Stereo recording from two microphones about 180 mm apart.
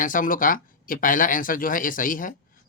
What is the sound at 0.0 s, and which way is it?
Speech, 45° left (ahead or behind).